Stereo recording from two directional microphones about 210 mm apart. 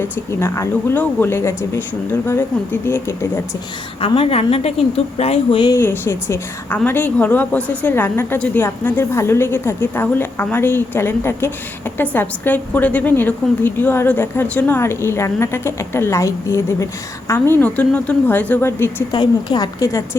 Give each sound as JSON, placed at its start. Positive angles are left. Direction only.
{"t": 0.3, "sound": "a woman's voice", "side_deg": 10}
{"t": 2.8, "sound": "a woman's voice", "side_deg": 10}
{"t": 4.0, "sound": "a woman's voice", "side_deg": 25}
{"t": 19.1, "sound": "a woman's voice", "side_deg": 20}